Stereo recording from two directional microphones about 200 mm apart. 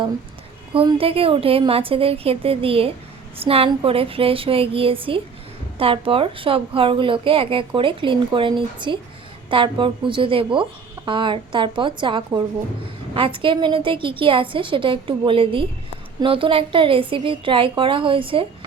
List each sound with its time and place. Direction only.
0.7 s a woman's voice: 25° right (ahead or behind)